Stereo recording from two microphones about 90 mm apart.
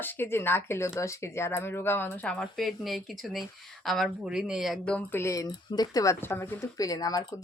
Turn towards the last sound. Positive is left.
turn(degrees=50)  # may be behind; listen again after turning